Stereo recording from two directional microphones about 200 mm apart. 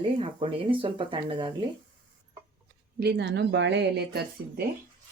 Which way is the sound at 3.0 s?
60° right (ahead or behind).